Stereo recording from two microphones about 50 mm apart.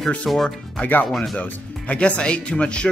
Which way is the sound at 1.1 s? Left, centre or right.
Centre.